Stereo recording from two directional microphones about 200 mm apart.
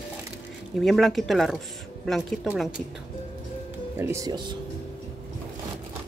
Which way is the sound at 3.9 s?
15° right (ahead or behind).